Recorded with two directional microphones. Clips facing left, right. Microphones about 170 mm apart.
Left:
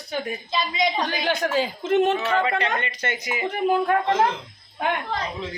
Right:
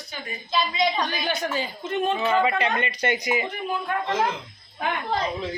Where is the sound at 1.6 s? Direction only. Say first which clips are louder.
Left 6 dB; 90° left.